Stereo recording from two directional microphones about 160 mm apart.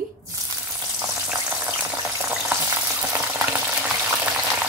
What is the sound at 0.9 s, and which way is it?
Frying, 10° right (ahead or behind).